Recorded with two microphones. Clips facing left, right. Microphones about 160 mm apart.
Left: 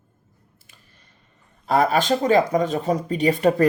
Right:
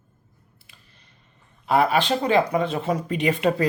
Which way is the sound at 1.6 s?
40° left (ahead or behind).